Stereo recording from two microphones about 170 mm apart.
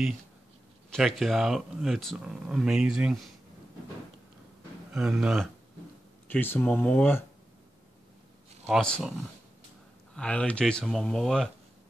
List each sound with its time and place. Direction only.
0.9 s speech: centre (ahead or behind)
4.9 s speech: 5° right (ahead or behind)
6.2 s speech: 10° left (ahead or behind)
8.6 s speech: centre (ahead or behind)
10.1 s speech: 5° left (ahead or behind)